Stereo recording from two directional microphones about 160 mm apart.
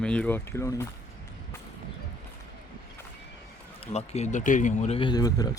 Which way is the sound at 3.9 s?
45° left (ahead or behind).